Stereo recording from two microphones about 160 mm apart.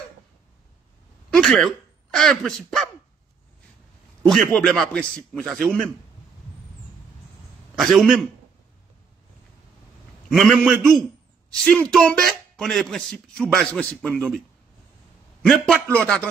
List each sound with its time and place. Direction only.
1.3 s speech: centre (ahead or behind)
4.3 s speech: 5° left (ahead or behind)
7.7 s a man's voice: centre (ahead or behind)
10.3 s speech: centre (ahead or behind)
15.4 s speech: 5° left (ahead or behind)